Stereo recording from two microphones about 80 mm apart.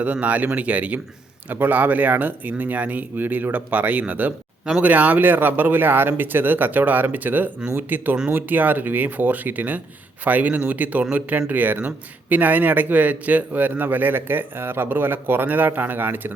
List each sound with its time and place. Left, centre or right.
0.0 s a man's voice: centre